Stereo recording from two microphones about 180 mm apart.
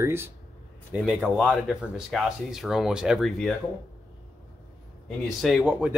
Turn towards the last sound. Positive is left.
turn(degrees=-5)  # may be behind; listen again after turning